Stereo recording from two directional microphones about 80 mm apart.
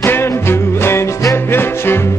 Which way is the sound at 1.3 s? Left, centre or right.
Left.